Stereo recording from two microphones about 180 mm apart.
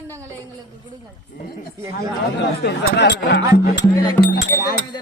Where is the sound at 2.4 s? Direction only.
75° left (ahead or behind).